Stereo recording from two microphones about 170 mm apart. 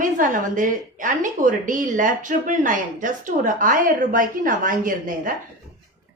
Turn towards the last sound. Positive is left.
turn(degrees=-50)  # may be behind; listen again after turning